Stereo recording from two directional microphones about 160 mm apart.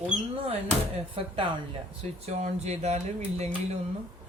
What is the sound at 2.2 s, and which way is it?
Speech, 45° right (ahead or behind).